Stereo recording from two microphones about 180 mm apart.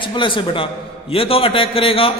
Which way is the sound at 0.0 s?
25° left (ahead or behind).